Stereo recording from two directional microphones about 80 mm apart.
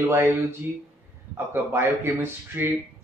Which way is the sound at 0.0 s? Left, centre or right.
Right.